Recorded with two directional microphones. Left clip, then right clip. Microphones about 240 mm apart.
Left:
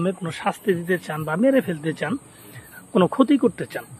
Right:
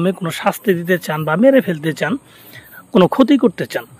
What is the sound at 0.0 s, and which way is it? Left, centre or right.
Speech, right.